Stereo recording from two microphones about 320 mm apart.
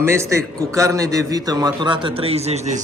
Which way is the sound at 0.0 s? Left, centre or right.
Centre.